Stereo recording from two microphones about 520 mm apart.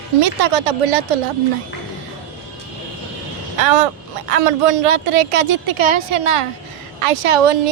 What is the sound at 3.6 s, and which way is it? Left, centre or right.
A woman's voice, right.